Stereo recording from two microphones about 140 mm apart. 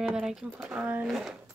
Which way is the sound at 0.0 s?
5° right (ahead or behind).